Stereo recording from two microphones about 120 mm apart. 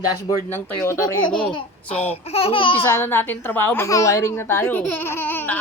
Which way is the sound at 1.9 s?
55° left (ahead or behind).